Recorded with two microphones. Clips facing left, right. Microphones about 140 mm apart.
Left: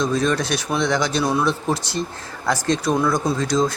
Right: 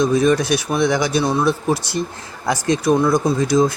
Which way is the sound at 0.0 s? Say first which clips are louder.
Right 5 dB; 10° right (ahead or behind).